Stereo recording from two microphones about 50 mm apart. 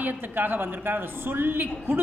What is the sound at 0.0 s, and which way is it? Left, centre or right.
A man's voice, right.